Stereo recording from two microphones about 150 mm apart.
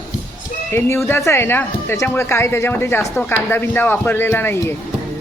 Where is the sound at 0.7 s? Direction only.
15° left (ahead or behind).